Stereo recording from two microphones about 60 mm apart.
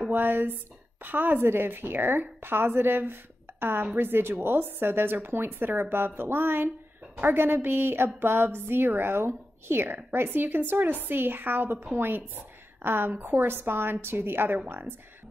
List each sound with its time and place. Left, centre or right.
0.1 s a woman's voice: right
12.4 s a sound: right
13.1 s a woman's voice: right